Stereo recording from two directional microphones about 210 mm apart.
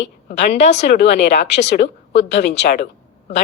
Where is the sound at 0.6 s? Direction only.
30° left (ahead or behind).